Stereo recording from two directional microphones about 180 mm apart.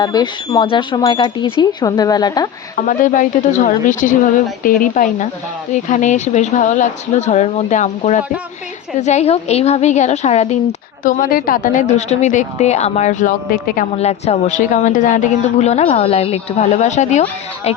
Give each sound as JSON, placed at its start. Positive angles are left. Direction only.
{"t": 0.0, "sound": "speech", "side_deg": 20}
{"t": 2.8, "sound": "a woman's voice", "side_deg": 45}
{"t": 11.0, "sound": "a woman's voice", "side_deg": 50}
{"t": 13.9, "sound": "speech", "side_deg": 35}